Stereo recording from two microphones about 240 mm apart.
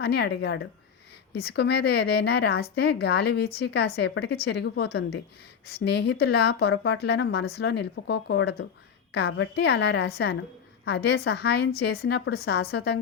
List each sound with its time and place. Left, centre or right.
0.0 s a woman's voice: left